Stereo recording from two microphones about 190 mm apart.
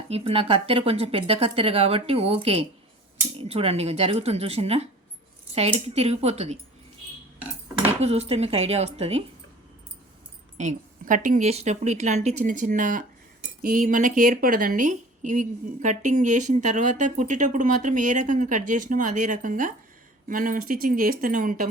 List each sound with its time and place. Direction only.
0.1 s speech: 30° right (ahead or behind)
8.0 s speech: 35° right (ahead or behind)
10.6 s speech: 40° right (ahead or behind)